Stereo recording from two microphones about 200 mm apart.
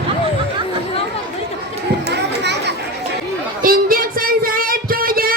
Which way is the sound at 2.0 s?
60° right (ahead or behind).